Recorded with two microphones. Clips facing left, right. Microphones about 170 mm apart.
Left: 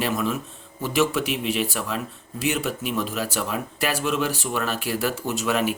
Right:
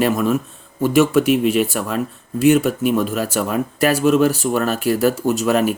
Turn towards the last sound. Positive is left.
turn(degrees=-40)  # may be behind; listen again after turning